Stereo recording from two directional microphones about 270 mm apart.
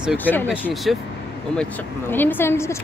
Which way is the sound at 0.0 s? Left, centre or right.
Centre.